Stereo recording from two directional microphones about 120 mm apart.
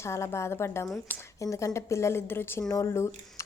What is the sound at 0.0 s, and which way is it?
A woman's voice, 25° left (ahead or behind).